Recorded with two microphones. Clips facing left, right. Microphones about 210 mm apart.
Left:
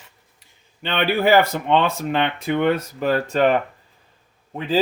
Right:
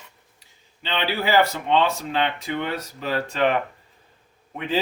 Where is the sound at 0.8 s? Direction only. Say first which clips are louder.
Left 6 dB; 55° left (ahead or behind).